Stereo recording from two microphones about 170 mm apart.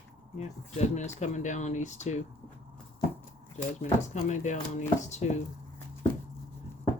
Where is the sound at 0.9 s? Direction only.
45° left (ahead or behind).